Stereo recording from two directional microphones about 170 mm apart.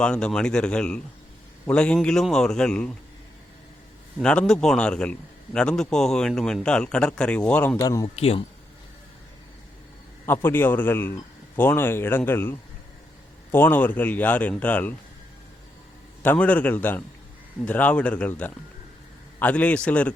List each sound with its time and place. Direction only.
0.0 s speech: 5° left (ahead or behind)
4.2 s speech: 5° left (ahead or behind)
7.8 s speech: 20° left (ahead or behind)
8.0 s speech: 35° left (ahead or behind)
10.2 s a man's voice: 15° left (ahead or behind)
16.2 s a man's voice: 10° left (ahead or behind)